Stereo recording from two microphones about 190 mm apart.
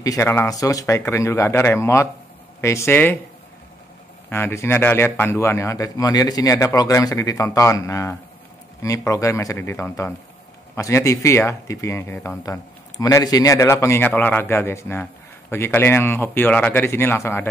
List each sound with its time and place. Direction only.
0.0 s speech: 15° left (ahead or behind)
4.3 s speech: 10° left (ahead or behind)